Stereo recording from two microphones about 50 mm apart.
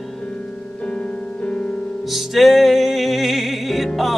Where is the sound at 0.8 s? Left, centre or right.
Left.